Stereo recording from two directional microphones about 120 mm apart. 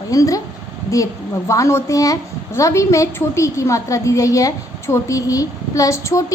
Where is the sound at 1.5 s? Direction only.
25° left (ahead or behind).